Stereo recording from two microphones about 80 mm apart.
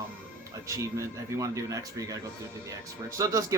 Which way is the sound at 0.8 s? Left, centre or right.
Right.